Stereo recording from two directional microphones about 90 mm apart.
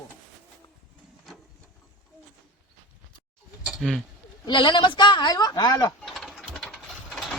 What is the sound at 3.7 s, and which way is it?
Speech, centre (ahead or behind).